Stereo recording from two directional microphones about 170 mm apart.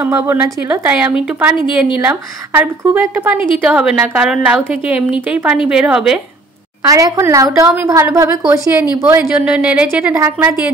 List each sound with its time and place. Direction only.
0.0 s a woman's voice: 15° right (ahead or behind)
6.8 s a woman's voice: 20° right (ahead or behind)